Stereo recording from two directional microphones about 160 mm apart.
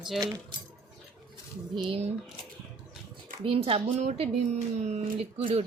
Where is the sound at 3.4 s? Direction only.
35° right (ahead or behind).